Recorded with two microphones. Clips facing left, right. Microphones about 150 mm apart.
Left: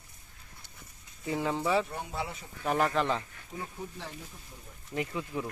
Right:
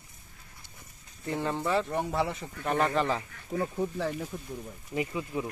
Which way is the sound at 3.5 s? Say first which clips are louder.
Right 10 dB; 75° right (ahead or behind).